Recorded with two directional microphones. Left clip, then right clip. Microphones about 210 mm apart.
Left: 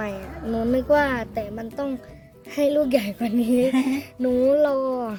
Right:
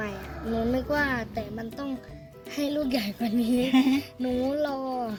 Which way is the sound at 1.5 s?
35° left (ahead or behind).